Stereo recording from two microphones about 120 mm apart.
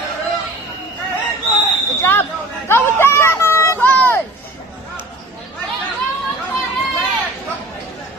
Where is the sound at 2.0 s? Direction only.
20° left (ahead or behind).